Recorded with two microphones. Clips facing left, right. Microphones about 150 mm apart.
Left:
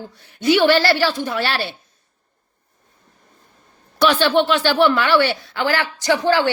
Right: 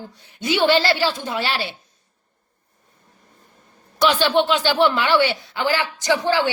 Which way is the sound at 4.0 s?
15° right (ahead or behind).